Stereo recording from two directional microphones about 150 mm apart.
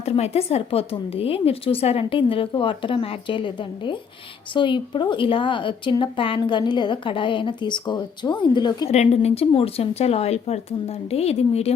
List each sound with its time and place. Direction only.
0.0 s a woman's voice: 45° left (ahead or behind)
8.9 s speech: 45° left (ahead or behind)